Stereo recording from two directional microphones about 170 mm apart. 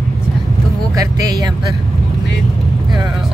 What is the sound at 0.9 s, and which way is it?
Speech, 20° right (ahead or behind).